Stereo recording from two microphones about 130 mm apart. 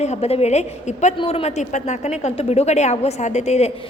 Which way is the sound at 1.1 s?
45° left (ahead or behind).